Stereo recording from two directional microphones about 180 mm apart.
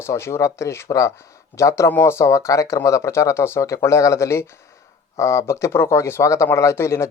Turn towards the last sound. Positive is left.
turn(degrees=15)  # may be behind; listen again after turning